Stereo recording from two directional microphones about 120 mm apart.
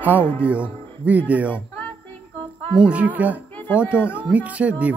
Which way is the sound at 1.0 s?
10° right (ahead or behind).